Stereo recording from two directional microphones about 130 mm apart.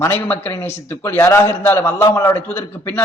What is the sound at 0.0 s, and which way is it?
Speech, 15° left (ahead or behind).